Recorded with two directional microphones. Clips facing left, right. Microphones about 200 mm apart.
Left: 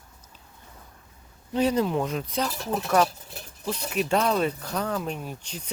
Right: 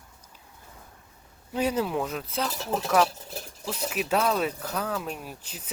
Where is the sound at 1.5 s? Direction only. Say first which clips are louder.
Left 3 dB; 10° right (ahead or behind).